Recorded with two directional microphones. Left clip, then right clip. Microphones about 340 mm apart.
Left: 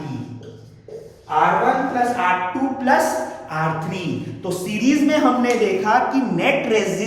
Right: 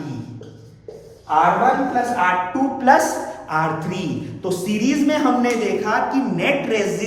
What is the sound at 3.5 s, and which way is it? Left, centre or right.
Speech, centre.